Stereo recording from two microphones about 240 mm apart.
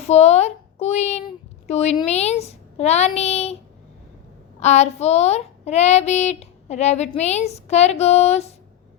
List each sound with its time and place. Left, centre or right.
0.1 s speech: left
4.6 s speech: left